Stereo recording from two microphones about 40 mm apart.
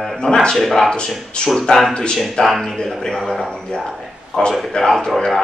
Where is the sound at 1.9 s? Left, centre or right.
Left.